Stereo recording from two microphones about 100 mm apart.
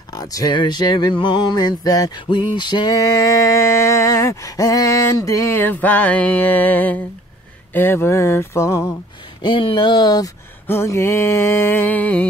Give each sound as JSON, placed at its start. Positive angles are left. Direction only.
{"t": 0.1, "sound": "speech", "side_deg": 35}
{"t": 0.6, "sound": "music", "side_deg": 45}
{"t": 2.2, "sound": "music", "side_deg": 50}
{"t": 3.0, "sound": "a sound", "side_deg": 30}
{"t": 9.4, "sound": "music", "side_deg": 55}
{"t": 10.7, "sound": "a sound", "side_deg": 25}